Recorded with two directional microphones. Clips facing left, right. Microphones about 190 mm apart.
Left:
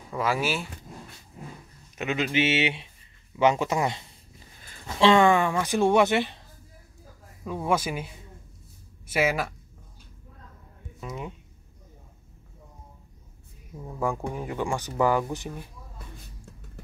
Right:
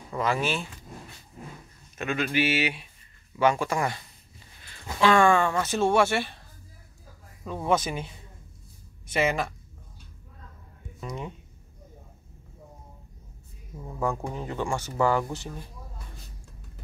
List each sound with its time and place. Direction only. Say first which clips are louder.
0.1 s speech: even; 5° left (ahead or behind)
2.0 s speech: left 1 dB; 20° left (ahead or behind)
7.4 s speech: right 1 dB; 10° left (ahead or behind)
11.0 s speech: even; 5° left (ahead or behind)
14.0 s speech: left 1 dB; 10° left (ahead or behind)